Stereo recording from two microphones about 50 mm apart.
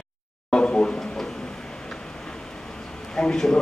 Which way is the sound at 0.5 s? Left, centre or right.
Centre.